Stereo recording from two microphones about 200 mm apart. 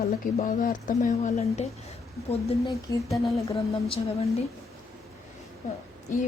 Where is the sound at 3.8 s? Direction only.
30° left (ahead or behind).